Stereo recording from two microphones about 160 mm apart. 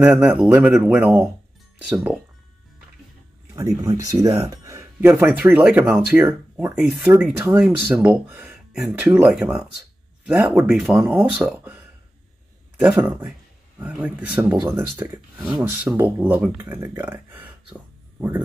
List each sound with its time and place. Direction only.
0.0 s speech: 5° right (ahead or behind)
3.5 s speech: 20° right (ahead or behind); by 6.0 s 5° right (ahead or behind)
6.1 s speech: 15° right (ahead or behind)
6.8 s speech: 5° right (ahead or behind)